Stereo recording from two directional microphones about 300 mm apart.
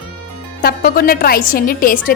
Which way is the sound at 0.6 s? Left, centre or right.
Left.